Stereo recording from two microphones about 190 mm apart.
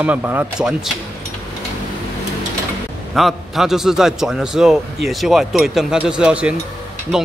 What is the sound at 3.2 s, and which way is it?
A man's voice, centre (ahead or behind).